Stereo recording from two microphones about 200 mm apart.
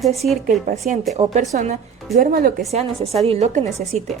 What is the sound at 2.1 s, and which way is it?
Speech, 45° right (ahead or behind).